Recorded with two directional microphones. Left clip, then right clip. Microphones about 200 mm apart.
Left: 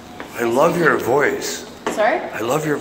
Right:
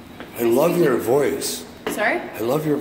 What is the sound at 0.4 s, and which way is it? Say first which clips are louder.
Speech: left 2 dB; 20° right (ahead or behind).